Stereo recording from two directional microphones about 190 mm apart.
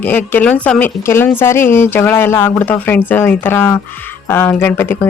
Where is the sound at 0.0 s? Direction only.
10° left (ahead or behind).